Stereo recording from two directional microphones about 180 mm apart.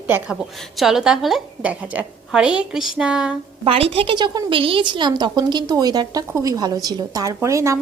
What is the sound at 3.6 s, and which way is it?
A woman's voice, 35° right (ahead or behind).